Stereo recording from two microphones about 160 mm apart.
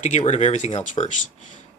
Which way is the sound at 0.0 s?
45° left (ahead or behind).